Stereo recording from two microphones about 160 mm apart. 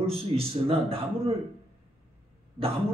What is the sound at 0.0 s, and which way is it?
A man's voice, 35° right (ahead or behind).